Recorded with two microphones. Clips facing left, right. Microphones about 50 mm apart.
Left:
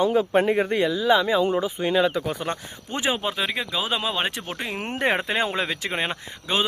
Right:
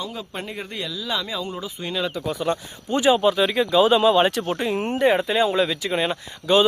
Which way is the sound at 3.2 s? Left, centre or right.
Centre.